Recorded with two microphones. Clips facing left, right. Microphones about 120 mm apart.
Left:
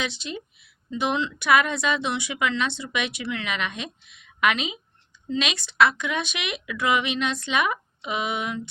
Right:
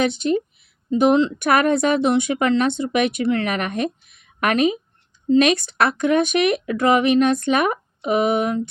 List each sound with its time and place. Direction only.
0.0 s speech: 50° right (ahead or behind)